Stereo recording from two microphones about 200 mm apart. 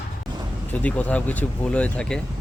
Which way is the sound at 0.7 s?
5° left (ahead or behind).